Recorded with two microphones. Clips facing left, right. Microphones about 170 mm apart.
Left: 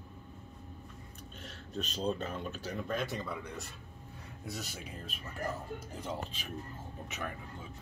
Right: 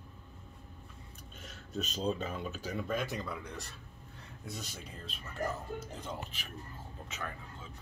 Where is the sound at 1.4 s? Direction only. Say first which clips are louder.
Right 1 dB; 5° right (ahead or behind).